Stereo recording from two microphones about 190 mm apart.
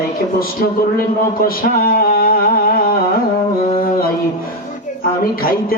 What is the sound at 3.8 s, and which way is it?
Mantra, 50° left (ahead or behind).